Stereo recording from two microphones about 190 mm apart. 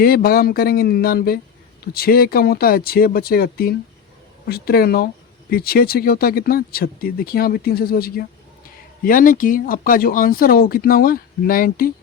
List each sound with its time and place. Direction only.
0.0 s speech: 50° left (ahead or behind)